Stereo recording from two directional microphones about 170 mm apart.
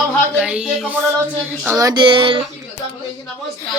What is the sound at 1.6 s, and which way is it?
Speech, 20° right (ahead or behind).